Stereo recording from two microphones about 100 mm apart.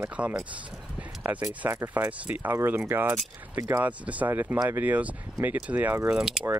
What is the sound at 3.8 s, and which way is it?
Speech, 15° right (ahead or behind).